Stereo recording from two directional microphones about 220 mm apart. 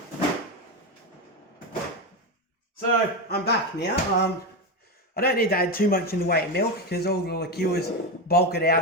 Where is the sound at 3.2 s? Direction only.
45° left (ahead or behind).